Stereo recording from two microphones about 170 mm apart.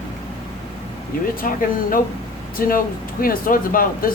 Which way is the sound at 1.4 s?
55° left (ahead or behind).